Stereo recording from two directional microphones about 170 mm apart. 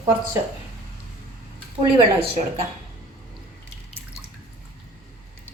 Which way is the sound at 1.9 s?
35° right (ahead or behind).